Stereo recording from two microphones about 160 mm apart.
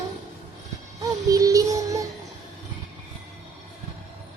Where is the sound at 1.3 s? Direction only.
20° right (ahead or behind).